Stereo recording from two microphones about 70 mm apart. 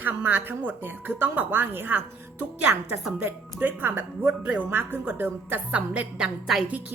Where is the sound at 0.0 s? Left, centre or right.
Right.